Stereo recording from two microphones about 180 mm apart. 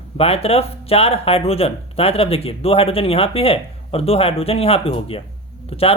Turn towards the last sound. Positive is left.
turn(degrees=30)  # may be behind; listen again after turning